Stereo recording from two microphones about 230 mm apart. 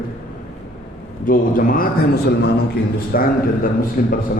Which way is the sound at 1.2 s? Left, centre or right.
Left.